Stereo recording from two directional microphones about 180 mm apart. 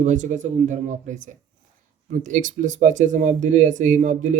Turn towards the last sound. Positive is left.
turn(degrees=-45)  # may be behind; listen again after turning